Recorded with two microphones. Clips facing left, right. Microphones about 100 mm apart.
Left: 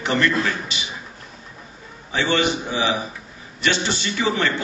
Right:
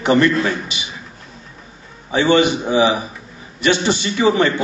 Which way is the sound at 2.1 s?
15° right (ahead or behind).